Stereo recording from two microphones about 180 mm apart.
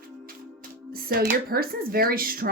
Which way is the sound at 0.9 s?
55° right (ahead or behind).